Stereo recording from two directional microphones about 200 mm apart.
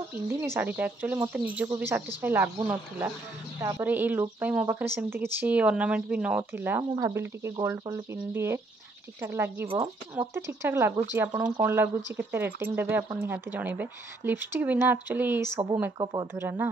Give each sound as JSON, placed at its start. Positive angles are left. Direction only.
{"t": 0.1, "sound": "speech", "side_deg": -10}